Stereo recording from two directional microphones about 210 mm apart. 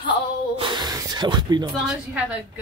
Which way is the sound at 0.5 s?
20° right (ahead or behind).